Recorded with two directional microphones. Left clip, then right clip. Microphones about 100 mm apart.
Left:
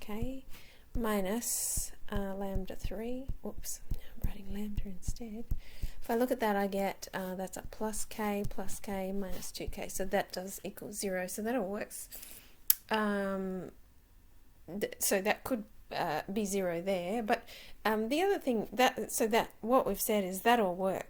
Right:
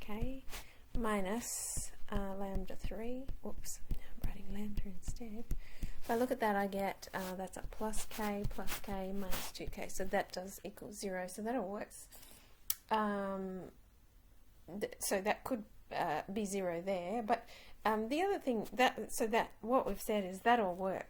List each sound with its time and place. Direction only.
0.0 s a woman's voice: 35° left (ahead or behind)
8.5 s a woman's voice: 30° left (ahead or behind)
11.1 s a woman's voice: 45° left (ahead or behind)
14.7 s a woman's voice: 40° left (ahead or behind)
15.9 s a woman's voice: 20° left (ahead or behind)